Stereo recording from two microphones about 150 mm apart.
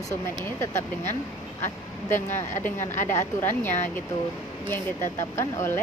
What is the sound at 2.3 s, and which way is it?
Speech, 15° left (ahead or behind).